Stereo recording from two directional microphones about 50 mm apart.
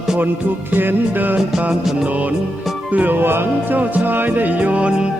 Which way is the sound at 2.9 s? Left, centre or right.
Right.